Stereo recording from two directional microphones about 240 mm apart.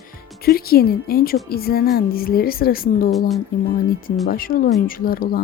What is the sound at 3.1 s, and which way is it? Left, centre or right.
Speech, centre.